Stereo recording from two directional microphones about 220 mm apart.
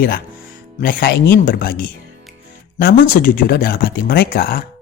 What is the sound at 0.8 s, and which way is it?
Speech, 45° left (ahead or behind).